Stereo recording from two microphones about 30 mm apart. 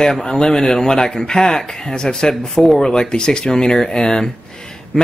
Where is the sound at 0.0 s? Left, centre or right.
Left.